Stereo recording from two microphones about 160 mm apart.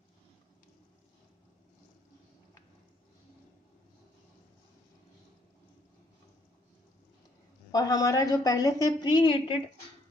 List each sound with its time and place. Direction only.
7.7 s a woman's voice: 20° left (ahead or behind)